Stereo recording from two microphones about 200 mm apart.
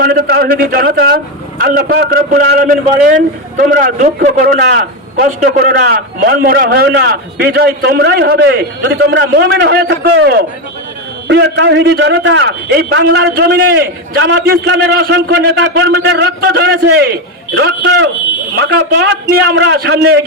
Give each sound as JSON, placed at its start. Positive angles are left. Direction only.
{"t": 0.0, "sound": "a man's voice", "side_deg": -50}